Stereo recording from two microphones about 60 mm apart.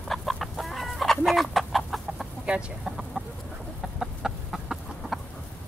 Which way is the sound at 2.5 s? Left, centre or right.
Centre.